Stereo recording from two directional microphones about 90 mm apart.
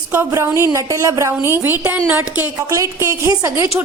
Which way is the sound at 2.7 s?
40° right (ahead or behind).